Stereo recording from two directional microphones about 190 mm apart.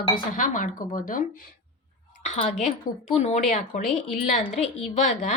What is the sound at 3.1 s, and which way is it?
A woman's voice, 35° left (ahead or behind).